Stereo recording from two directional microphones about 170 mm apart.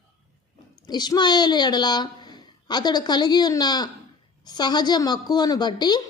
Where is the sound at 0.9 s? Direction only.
25° left (ahead or behind).